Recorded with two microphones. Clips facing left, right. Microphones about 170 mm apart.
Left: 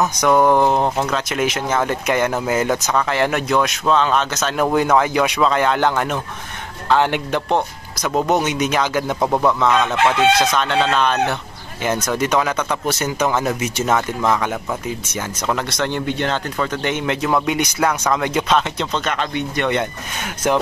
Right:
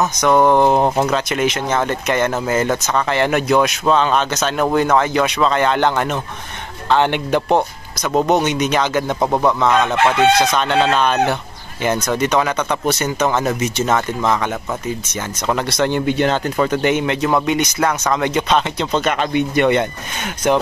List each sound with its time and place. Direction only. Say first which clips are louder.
0.2 s speech: right 2 dB; 5° left (ahead or behind)
0.8 s speech: right 3 dB; 20° right (ahead or behind)
1.1 s speech: right 2 dB; centre (ahead or behind)
2.9 s speech: right 1 dB; centre (ahead or behind)
9.2 s speech: even; 5° right (ahead or behind)
18.9 s speech: right 4 dB; 10° right (ahead or behind)